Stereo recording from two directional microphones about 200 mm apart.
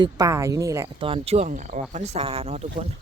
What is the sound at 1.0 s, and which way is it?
Speech, 30° right (ahead or behind).